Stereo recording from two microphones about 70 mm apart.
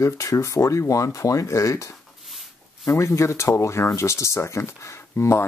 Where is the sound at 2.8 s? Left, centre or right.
Left.